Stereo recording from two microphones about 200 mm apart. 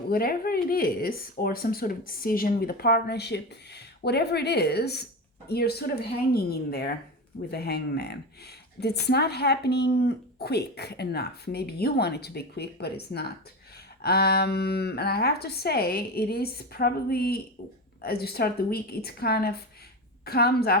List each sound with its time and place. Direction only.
0.1 s speech: 50° left (ahead or behind)